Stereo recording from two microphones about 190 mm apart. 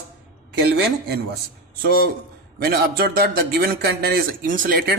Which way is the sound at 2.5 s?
55° right (ahead or behind).